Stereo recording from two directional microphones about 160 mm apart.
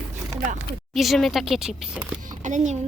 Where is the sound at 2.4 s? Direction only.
50° right (ahead or behind).